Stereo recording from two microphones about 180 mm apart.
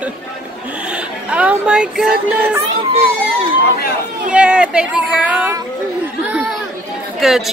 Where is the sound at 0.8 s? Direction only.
5° right (ahead or behind).